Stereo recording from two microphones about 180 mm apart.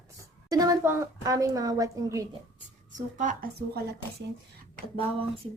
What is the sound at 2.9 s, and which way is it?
Speech, 45° right (ahead or behind).